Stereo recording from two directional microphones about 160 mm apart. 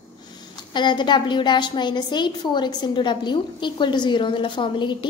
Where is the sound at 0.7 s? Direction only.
30° left (ahead or behind).